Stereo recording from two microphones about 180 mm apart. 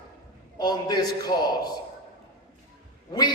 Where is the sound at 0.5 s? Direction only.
20° left (ahead or behind).